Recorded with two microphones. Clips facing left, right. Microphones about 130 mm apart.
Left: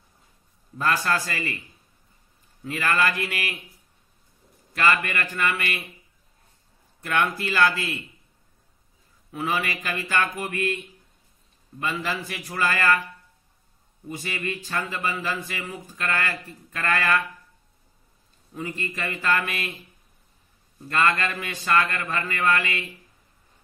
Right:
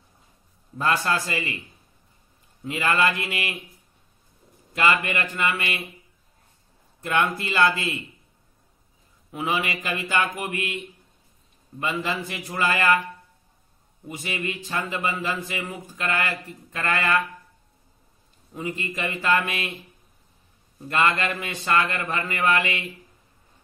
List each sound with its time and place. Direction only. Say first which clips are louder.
0.7 s speech: right 1 dB; 25° right (ahead or behind)
2.6 s speech: right 1 dB; 20° right (ahead or behind)
4.7 s speech: right 1 dB; 25° right (ahead or behind)
7.0 s speech: right 1 dB; 25° right (ahead or behind)
9.3 s speech: right 1 dB; 20° right (ahead or behind)
11.8 s speech: right 1 dB; 25° right (ahead or behind)
14.0 s speech: right 1 dB; 20° right (ahead or behind)
18.5 s speech: right 1 dB; 20° right (ahead or behind)
21.1 s speech: right 1 dB; 25° right (ahead or behind)